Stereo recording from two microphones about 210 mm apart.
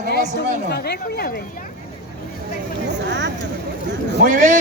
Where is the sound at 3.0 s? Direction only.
60° right (ahead or behind).